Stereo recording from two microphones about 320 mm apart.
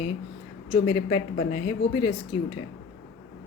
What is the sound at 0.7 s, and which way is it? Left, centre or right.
A woman's voice, centre.